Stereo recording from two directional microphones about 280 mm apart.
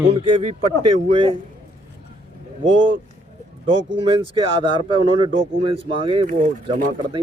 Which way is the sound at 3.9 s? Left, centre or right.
Centre.